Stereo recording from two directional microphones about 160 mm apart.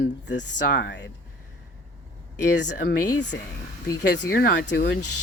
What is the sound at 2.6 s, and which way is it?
Speech, 90° left.